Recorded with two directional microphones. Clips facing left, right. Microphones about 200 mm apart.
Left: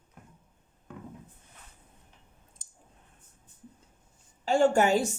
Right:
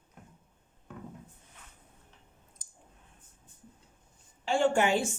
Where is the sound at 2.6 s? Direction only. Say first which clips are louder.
Right 1 dB; 25° left (ahead or behind).